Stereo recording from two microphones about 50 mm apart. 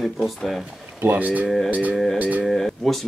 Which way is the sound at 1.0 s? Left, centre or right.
Right.